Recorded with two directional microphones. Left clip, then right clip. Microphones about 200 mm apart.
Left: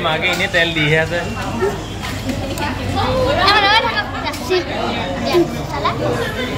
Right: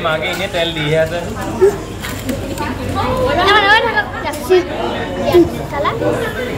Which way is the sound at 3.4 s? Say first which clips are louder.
Right 2 dB; 15° right (ahead or behind).